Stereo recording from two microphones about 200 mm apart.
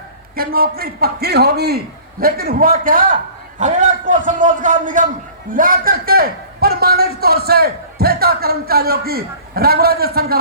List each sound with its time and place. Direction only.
0.3 s a man's voice: 50° right (ahead or behind)